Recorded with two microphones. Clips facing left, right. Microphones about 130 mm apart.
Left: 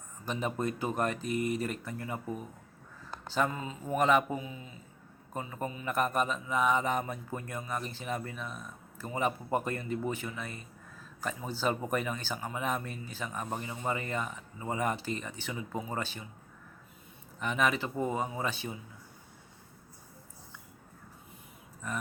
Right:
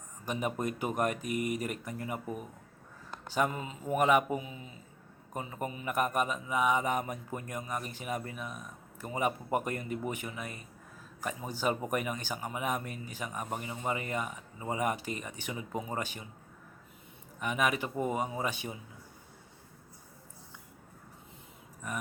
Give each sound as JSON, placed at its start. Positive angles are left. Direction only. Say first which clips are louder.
{"t": 0.3, "sound": "a man's voice", "louder": "even", "side_deg": -15}
{"t": 17.4, "sound": "a man's voice", "louder": "left 1 dB", "side_deg": -10}